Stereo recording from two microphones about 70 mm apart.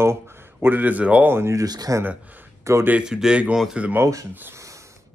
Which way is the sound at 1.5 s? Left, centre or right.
Right.